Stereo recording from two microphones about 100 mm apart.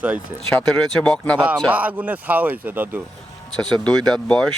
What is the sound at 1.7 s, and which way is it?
Speech, 15° right (ahead or behind).